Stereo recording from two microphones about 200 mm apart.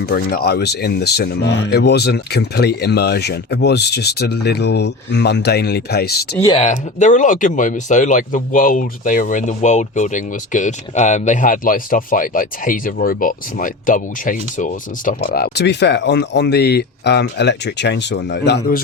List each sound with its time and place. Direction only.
0.1 s speech: 50° left (ahead or behind)
6.3 s speech: 15° left (ahead or behind)
6.6 s speech: 35° left (ahead or behind); by 18.8 s 55° left (ahead or behind)